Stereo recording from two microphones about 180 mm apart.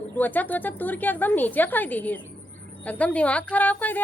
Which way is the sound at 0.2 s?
10° left (ahead or behind).